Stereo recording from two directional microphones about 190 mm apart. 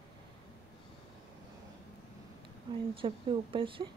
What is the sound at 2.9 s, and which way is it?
Speech, 25° right (ahead or behind).